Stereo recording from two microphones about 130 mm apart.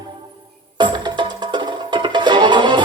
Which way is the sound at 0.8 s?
35° right (ahead or behind).